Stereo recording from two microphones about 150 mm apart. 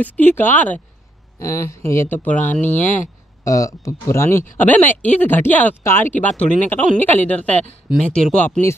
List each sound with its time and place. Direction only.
0.0 s speech: 10° left (ahead or behind)